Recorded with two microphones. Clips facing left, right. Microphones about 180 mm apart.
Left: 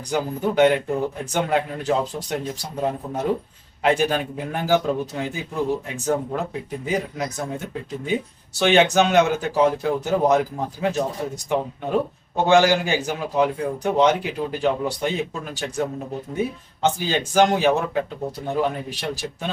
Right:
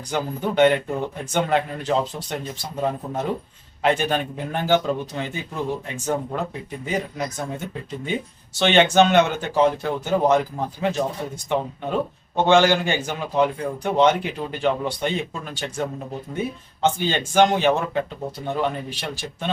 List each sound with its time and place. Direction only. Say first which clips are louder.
0.1 s speech: left 2 dB; 10° left (ahead or behind)
8.5 s speech: even; 5° left (ahead or behind)
17.0 s speech: even; 5° left (ahead or behind)